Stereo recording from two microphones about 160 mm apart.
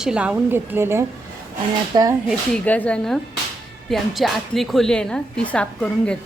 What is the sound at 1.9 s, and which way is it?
Speech, 25° right (ahead or behind).